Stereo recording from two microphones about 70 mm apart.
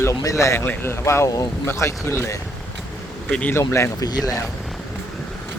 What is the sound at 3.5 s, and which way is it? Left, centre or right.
Speech, left.